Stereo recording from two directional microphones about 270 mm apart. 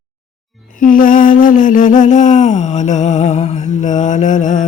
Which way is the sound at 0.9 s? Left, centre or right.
Left.